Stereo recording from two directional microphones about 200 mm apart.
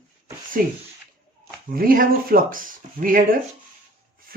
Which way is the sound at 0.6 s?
45° right (ahead or behind).